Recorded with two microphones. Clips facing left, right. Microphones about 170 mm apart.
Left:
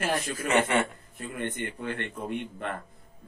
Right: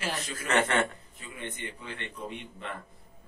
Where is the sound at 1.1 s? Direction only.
55° left (ahead or behind).